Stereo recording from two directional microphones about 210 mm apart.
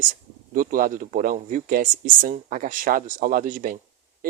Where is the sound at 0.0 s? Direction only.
40° right (ahead or behind).